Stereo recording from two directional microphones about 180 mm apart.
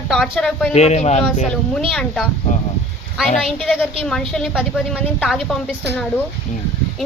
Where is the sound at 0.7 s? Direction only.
40° left (ahead or behind).